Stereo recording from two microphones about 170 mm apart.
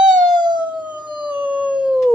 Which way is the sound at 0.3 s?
25° right (ahead or behind).